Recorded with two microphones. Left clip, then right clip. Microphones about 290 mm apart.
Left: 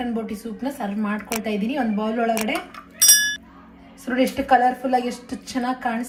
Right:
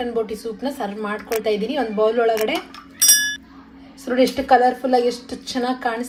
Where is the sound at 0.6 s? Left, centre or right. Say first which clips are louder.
Even; right.